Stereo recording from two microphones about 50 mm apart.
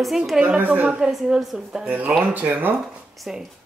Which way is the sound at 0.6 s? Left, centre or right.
Right.